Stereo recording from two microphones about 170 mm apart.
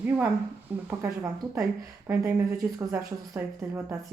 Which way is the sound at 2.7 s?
10° right (ahead or behind).